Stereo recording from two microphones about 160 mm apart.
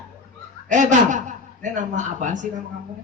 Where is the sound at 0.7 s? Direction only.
50° right (ahead or behind).